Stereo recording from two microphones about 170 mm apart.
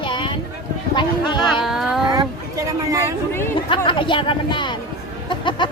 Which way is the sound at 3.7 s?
30° left (ahead or behind).